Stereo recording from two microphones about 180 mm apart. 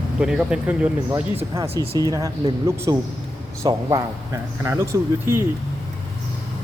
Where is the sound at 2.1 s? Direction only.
20° right (ahead or behind).